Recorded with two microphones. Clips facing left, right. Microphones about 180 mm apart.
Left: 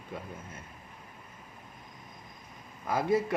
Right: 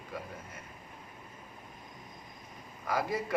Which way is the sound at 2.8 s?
25° left (ahead or behind).